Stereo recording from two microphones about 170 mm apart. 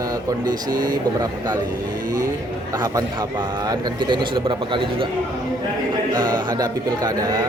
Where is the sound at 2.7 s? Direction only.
20° right (ahead or behind).